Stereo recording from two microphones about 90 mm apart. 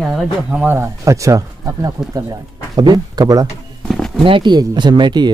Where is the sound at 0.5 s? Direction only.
25° right (ahead or behind).